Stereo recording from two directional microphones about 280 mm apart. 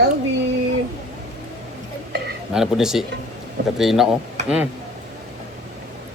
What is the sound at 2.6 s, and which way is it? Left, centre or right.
Speech, centre.